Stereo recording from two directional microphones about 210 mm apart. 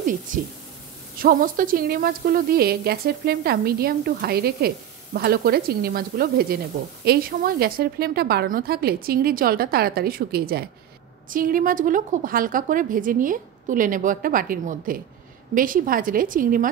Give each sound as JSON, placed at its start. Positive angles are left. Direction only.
{"t": 0.3, "sound": "a woman's voice", "side_deg": -40}